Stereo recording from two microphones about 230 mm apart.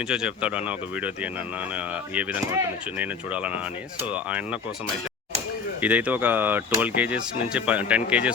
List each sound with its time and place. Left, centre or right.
0.1 s speech: centre
5.8 s speech: centre